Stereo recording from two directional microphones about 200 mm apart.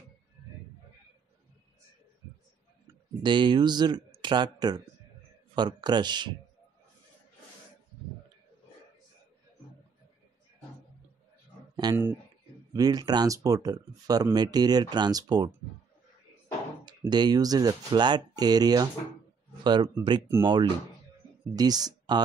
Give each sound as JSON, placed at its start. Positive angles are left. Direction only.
{"t": 3.2, "sound": "speech", "side_deg": -25}
{"t": 11.7, "sound": "speech", "side_deg": -20}
{"t": 16.8, "sound": "speech", "side_deg": -20}